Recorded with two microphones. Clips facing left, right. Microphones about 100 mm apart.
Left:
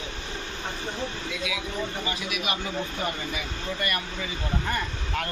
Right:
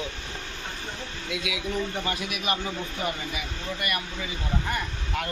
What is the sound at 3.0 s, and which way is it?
Speech, 15° right (ahead or behind).